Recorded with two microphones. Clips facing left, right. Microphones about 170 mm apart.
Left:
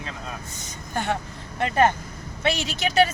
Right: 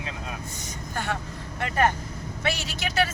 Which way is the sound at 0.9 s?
20° left (ahead or behind).